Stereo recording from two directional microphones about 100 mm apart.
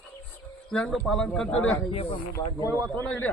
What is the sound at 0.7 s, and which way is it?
A man's voice, 10° left (ahead or behind).